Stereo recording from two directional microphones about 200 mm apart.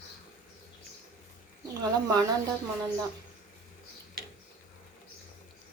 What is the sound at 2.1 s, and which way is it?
Speech, 20° right (ahead or behind).